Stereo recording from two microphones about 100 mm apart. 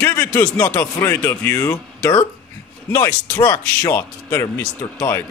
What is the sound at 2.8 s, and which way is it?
Speech, 25° left (ahead or behind).